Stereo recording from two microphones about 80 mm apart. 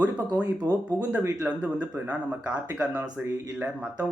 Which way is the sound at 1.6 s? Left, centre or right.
Centre.